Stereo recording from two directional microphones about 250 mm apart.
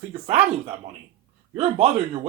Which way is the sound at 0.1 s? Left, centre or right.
Right.